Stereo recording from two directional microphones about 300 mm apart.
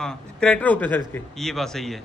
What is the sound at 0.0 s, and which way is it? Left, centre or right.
A man's voice, centre.